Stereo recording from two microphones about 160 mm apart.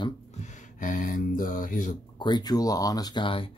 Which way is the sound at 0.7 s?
55° left (ahead or behind).